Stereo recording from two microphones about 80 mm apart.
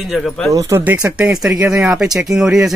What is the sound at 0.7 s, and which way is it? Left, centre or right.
A man's voice, centre.